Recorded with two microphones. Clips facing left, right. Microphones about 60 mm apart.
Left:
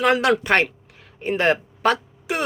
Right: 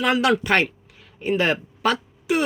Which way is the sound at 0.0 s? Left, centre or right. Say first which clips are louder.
Left 1 dB; left.